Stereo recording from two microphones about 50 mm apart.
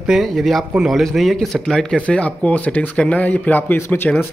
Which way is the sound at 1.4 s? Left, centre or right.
Centre.